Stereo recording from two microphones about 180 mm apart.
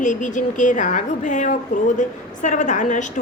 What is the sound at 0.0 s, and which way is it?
A woman's voice, 45° left (ahead or behind).